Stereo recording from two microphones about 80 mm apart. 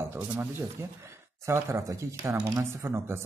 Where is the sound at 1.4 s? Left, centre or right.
Right.